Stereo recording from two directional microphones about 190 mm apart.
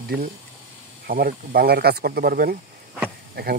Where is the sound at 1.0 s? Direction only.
55° right (ahead or behind).